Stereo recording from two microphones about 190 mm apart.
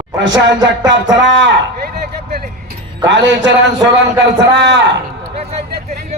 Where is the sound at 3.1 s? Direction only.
70° right (ahead or behind).